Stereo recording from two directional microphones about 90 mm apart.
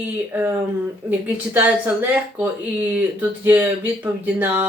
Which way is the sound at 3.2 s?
20° right (ahead or behind).